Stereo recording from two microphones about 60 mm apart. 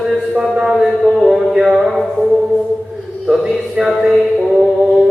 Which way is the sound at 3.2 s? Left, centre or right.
Centre.